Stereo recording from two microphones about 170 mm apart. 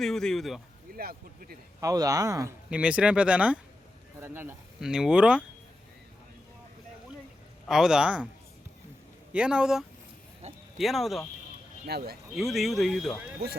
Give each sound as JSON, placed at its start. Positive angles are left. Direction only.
{"t": 0.0, "sound": "speech", "side_deg": 5}
{"t": 0.9, "sound": "speech", "side_deg": -65}
{"t": 1.8, "sound": "speech", "side_deg": -20}
{"t": 2.6, "sound": "speech", "side_deg": -5}
{"t": 7.7, "sound": "speech", "side_deg": -5}
{"t": 9.3, "sound": "speech", "side_deg": -5}
{"t": 10.4, "sound": "a sound", "side_deg": -40}
{"t": 10.8, "sound": "speech", "side_deg": 0}
{"t": 11.9, "sound": "speech", "side_deg": -70}
{"t": 12.3, "sound": "speech", "side_deg": 0}